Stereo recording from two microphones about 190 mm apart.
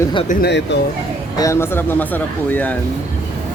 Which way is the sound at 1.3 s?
15° left (ahead or behind).